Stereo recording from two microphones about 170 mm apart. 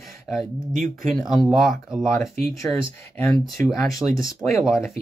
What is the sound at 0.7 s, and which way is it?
Speech, 50° right (ahead or behind).